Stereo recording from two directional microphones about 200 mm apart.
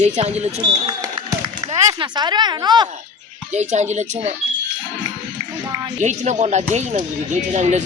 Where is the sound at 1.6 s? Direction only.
30° right (ahead or behind).